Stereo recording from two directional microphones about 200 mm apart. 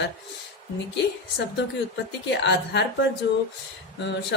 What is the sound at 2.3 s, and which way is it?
Speech, 60° left (ahead or behind).